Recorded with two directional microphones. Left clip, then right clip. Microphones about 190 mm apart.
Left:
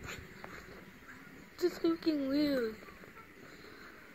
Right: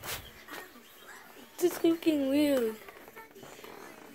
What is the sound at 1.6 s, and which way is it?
Speech, 20° right (ahead or behind).